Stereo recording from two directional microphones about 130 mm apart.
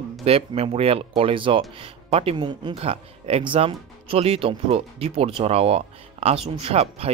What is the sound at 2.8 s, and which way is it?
Speech, 50° right (ahead or behind).